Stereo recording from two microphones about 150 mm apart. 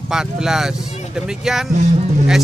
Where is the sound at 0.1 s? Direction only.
5° right (ahead or behind).